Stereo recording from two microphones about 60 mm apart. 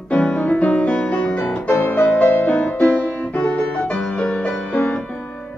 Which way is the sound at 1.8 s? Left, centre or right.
Left.